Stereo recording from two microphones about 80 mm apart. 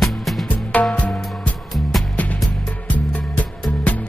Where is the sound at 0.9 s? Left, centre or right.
Centre.